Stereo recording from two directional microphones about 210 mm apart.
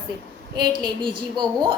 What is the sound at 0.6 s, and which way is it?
A woman's voice, 20° right (ahead or behind).